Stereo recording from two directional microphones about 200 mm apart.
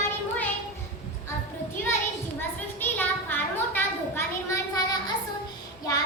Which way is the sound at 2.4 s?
10° left (ahead or behind).